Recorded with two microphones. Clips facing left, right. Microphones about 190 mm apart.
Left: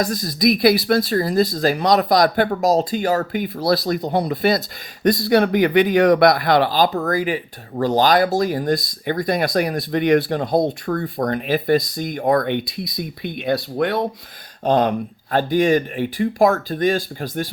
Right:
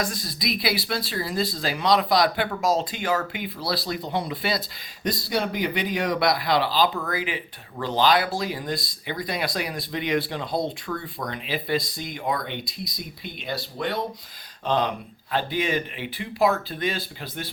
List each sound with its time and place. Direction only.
0.0 s speech: 40° left (ahead or behind)